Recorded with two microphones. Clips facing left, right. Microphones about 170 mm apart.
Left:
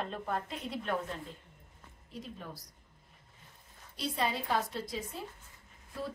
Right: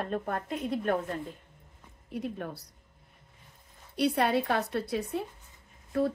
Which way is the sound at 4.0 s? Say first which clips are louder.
Right 8 dB; 65° right (ahead or behind).